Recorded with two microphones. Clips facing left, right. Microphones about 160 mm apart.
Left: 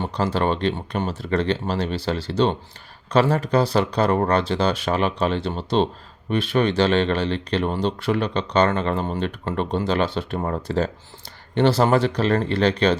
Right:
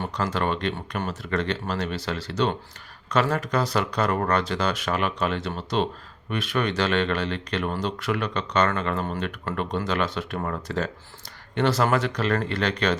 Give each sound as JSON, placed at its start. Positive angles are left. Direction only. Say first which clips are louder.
{"t": 0.0, "sound": "speech", "louder": "left 4 dB", "side_deg": 30}